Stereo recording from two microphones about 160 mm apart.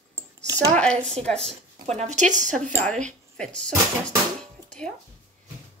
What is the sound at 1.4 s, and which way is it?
A woman's voice, 40° right (ahead or behind).